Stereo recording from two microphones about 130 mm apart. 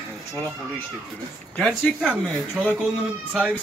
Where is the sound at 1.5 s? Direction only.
5° left (ahead or behind).